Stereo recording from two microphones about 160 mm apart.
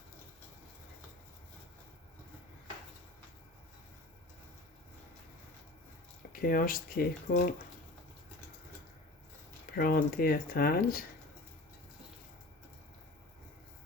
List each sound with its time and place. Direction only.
6.3 s speech: 65° left (ahead or behind)
9.7 s speech: 65° left (ahead or behind)